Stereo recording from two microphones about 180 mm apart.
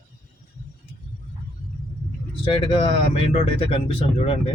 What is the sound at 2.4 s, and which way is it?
Speech, 30° left (ahead or behind).